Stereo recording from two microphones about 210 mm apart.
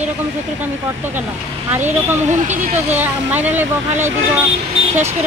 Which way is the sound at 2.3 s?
35° right (ahead or behind).